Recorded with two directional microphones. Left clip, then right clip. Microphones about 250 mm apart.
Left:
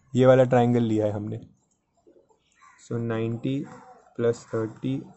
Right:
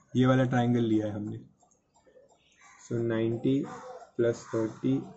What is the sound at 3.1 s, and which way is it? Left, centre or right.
Speech, left.